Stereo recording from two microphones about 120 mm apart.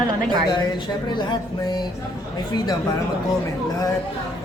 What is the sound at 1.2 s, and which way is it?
Music, 40° left (ahead or behind).